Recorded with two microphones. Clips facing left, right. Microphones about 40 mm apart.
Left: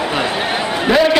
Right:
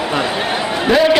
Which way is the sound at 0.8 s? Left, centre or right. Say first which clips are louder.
Right 1 dB; centre.